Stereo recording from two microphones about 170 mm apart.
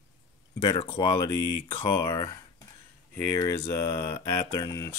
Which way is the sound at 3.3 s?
15° left (ahead or behind).